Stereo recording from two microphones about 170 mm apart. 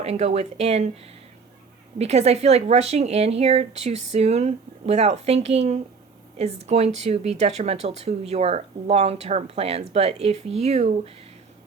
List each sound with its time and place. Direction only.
0.0 s speech: 40° right (ahead or behind)
2.0 s speech: 40° right (ahead or behind)